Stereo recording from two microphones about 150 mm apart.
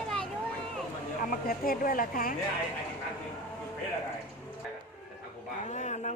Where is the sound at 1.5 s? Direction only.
75° left (ahead or behind).